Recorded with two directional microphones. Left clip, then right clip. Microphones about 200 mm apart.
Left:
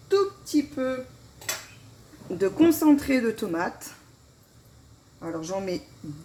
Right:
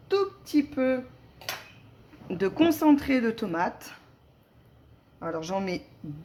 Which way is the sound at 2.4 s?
15° right (ahead or behind).